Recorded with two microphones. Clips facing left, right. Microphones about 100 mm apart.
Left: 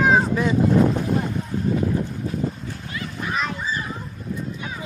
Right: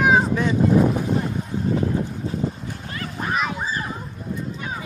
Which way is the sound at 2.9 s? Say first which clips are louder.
Right 1 dB; 40° right (ahead or behind).